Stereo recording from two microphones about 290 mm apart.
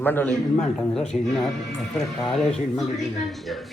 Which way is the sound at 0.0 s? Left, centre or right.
Centre.